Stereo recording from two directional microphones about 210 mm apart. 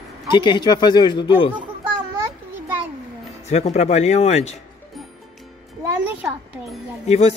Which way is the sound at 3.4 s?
30° left (ahead or behind).